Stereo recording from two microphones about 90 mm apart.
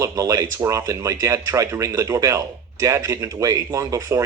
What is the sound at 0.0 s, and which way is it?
Speech, 40° right (ahead or behind).